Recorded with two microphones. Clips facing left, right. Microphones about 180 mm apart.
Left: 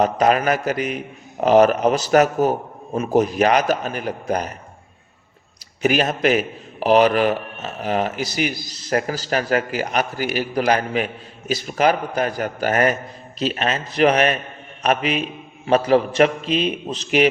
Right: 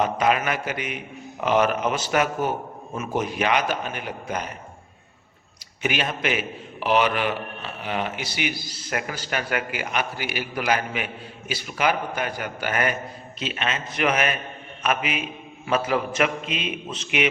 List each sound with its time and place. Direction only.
0.0 s a man's voice: 40° left (ahead or behind)
5.8 s a man's voice: 40° left (ahead or behind)